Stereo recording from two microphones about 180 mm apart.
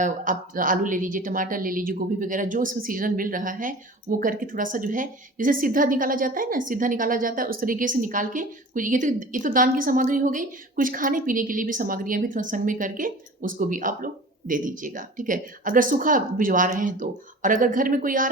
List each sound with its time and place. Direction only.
0.0 s a woman's voice: 50° right (ahead or behind)